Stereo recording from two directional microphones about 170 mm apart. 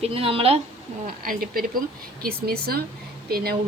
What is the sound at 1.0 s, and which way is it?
Speech, 60° right (ahead or behind).